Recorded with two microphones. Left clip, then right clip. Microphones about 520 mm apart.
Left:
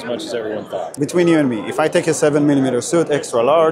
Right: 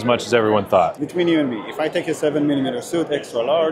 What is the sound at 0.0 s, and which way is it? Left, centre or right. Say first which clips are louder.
Speech: right 6 dB; right.